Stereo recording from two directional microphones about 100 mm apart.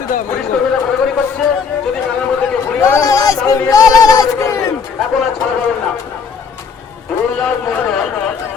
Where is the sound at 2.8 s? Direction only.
30° left (ahead or behind).